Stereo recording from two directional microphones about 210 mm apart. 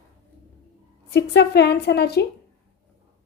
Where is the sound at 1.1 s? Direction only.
55° left (ahead or behind).